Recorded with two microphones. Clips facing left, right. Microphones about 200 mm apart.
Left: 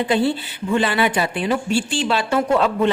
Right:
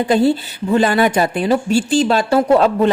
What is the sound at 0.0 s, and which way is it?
Speech, 40° right (ahead or behind).